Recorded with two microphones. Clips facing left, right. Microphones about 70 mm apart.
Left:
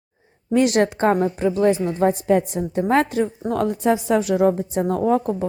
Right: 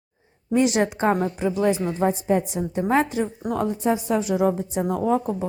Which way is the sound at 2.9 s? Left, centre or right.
Left.